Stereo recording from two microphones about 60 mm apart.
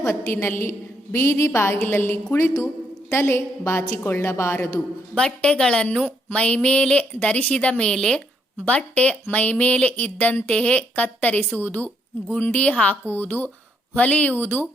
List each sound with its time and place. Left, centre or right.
0.1 s a woman's voice: left
5.1 s a woman's voice: centre
8.6 s a woman's voice: left
13.1 s speech: left
13.9 s a woman's voice: left